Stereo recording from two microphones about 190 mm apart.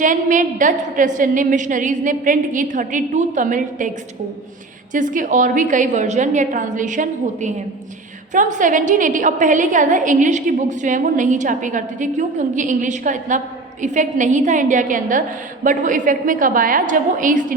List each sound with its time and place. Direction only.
0.0 s a woman's voice: 45° right (ahead or behind)
4.9 s a woman's voice: 45° right (ahead or behind)